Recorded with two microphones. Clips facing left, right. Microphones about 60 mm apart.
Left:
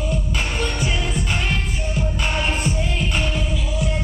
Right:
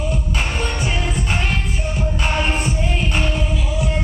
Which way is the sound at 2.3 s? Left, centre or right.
Centre.